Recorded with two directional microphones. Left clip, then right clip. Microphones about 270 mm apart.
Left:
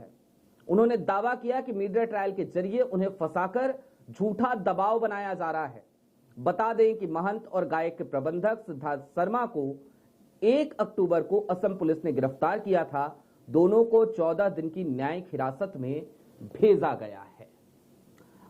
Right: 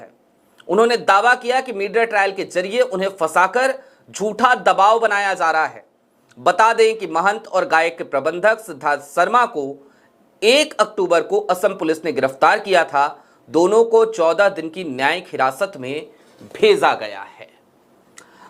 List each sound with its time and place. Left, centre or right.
0.6 s a man's voice: centre
13.7 s speech: right
14.0 s a man's voice: centre